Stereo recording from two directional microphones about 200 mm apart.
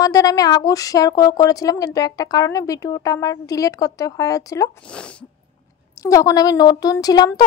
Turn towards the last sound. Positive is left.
turn(degrees=20)  # may be behind; listen again after turning